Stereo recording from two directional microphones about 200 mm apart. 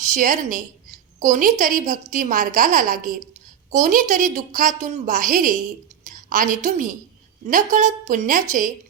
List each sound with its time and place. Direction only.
0.1 s a woman's voice: 40° right (ahead or behind)